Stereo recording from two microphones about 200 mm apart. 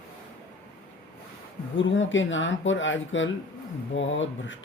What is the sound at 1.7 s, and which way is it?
Speech, 70° left (ahead or behind).